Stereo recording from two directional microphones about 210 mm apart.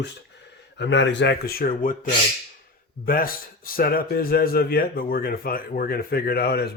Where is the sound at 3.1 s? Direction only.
45° left (ahead or behind).